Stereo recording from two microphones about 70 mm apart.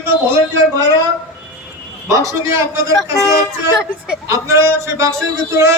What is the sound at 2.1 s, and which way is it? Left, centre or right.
Speech, right.